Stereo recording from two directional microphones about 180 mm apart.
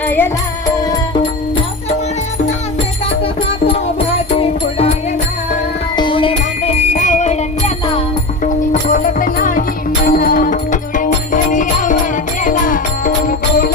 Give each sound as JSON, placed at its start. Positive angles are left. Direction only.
{"t": 0.0, "sound": "music", "side_deg": 10}
{"t": 0.8, "sound": "music", "side_deg": 20}
{"t": 6.0, "sound": "music", "side_deg": 30}
{"t": 8.4, "sound": "music", "side_deg": 45}